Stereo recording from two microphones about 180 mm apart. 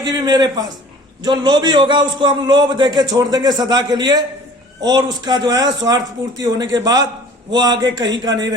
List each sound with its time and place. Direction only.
0.0 s a man's voice: 20° right (ahead or behind)